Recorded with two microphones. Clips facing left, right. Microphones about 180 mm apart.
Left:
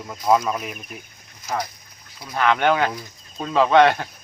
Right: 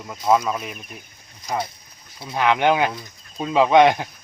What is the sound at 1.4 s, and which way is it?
Speech, 25° right (ahead or behind).